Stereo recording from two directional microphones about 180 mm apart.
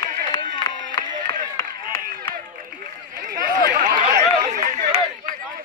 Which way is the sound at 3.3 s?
45° right (ahead or behind).